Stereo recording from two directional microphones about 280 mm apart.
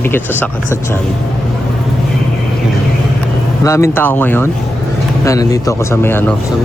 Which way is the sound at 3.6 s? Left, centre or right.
Centre.